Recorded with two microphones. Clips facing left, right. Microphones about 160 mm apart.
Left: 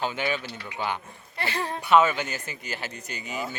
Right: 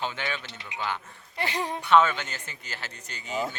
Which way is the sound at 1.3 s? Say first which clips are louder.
Even; 15° right (ahead or behind).